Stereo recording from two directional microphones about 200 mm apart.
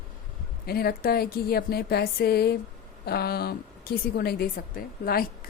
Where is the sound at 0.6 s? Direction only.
50° left (ahead or behind).